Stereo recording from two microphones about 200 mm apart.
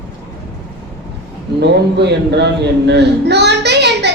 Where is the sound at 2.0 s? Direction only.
60° right (ahead or behind).